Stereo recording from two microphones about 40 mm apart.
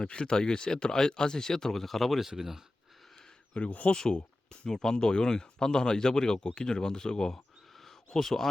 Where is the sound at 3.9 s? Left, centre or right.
Centre.